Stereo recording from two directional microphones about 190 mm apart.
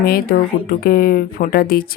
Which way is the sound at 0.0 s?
50° left (ahead or behind).